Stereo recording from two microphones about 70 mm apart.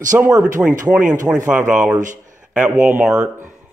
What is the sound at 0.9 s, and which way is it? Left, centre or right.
Speech, centre.